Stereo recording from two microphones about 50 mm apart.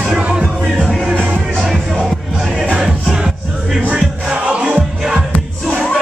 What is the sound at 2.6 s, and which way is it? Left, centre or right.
Music, right.